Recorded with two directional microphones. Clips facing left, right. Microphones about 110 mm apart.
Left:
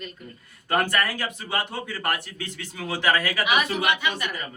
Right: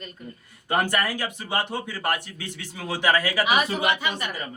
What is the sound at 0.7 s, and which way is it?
Speech, 15° right (ahead or behind).